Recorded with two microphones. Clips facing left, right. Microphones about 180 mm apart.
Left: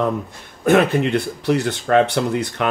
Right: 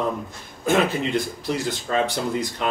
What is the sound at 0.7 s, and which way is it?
Speech, 65° left (ahead or behind).